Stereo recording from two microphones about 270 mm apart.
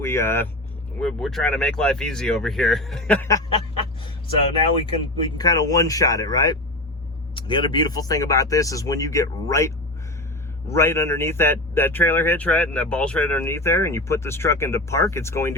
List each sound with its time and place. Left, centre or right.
0.0 s speech: centre
4.9 s speech: centre
10.8 s speech: centre